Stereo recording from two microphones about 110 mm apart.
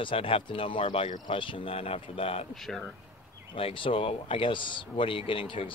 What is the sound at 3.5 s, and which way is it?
Speech, 50° left (ahead or behind).